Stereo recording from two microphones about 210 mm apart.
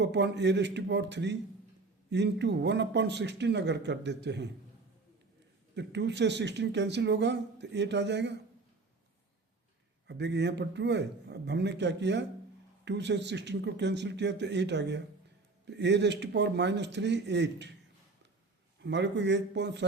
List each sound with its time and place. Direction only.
0.0 s speech: 55° right (ahead or behind)
5.7 s speech: 55° right (ahead or behind)
10.1 s speech: 55° right (ahead or behind)
18.8 s speech: 55° right (ahead or behind)